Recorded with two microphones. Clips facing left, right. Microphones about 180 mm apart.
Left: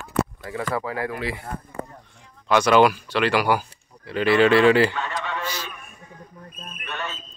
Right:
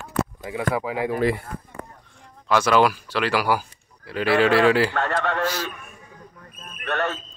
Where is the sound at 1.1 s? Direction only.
50° right (ahead or behind).